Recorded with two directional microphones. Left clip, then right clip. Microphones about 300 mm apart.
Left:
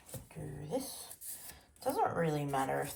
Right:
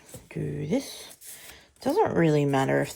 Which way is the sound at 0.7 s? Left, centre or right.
Right.